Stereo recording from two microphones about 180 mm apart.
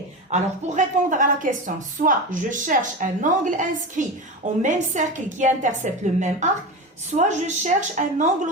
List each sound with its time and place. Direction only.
0.3 s a woman's voice: 40° right (ahead or behind)